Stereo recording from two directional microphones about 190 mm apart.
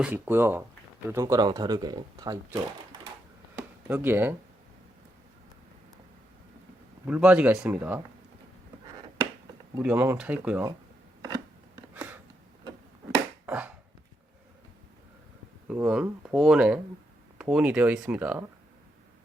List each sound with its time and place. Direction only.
0.0 s speech: 10° right (ahead or behind)
3.8 s speech: 10° right (ahead or behind)
7.1 s speech: 5° right (ahead or behind)
9.8 s speech: 10° right (ahead or behind)
11.9 s a sound: 10° right (ahead or behind)
13.5 s a sound: 10° right (ahead or behind)
15.6 s speech: 5° right (ahead or behind)